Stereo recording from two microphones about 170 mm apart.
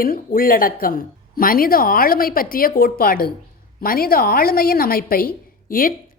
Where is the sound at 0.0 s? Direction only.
60° left (ahead or behind).